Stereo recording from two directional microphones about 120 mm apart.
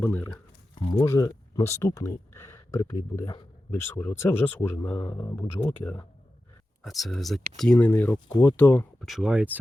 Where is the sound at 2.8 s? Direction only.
30° left (ahead or behind).